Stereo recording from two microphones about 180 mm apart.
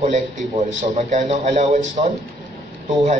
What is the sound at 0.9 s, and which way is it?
A man's voice, 35° right (ahead or behind).